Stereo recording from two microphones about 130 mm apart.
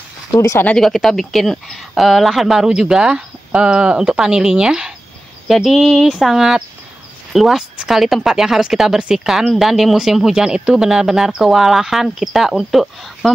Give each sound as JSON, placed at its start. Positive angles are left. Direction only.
{"t": 0.3, "sound": "speech", "side_deg": 20}
{"t": 0.7, "sound": "speech", "side_deg": 5}